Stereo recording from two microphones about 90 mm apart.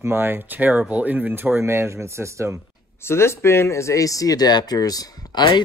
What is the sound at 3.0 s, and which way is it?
Speech, 30° left (ahead or behind).